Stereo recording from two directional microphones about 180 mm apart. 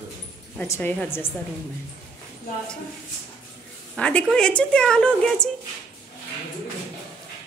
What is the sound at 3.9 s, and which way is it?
Speech, 5° left (ahead or behind).